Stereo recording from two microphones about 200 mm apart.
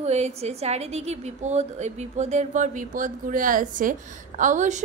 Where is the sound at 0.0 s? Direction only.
35° right (ahead or behind).